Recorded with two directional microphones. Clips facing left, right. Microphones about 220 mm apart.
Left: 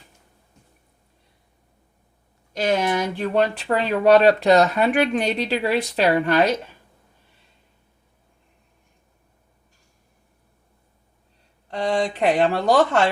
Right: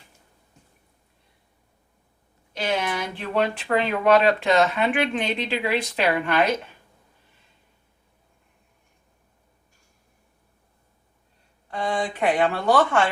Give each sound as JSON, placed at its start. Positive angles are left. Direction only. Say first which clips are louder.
{"t": 2.5, "sound": "speech", "louder": "left 5 dB", "side_deg": 45}
{"t": 12.2, "sound": "speech", "louder": "left 1 dB", "side_deg": 35}